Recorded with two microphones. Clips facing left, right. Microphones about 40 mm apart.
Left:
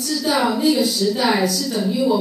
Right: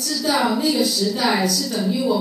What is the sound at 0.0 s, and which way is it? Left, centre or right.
A woman's voice, centre.